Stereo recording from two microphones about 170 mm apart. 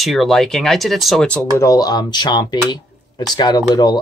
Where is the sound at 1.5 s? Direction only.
20° left (ahead or behind).